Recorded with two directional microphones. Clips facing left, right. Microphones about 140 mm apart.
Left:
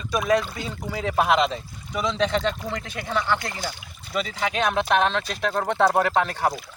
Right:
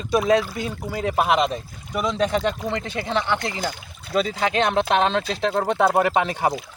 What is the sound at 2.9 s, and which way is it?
Speech, 20° right (ahead or behind).